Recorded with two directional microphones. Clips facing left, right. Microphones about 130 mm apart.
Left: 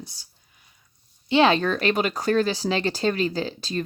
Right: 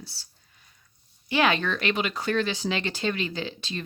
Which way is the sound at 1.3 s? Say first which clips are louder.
Left 5 dB; 30° left (ahead or behind).